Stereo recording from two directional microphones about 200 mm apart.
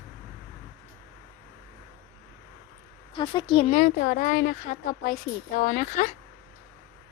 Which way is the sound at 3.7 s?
45° left (ahead or behind).